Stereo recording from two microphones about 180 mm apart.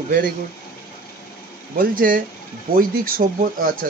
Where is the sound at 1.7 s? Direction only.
50° right (ahead or behind).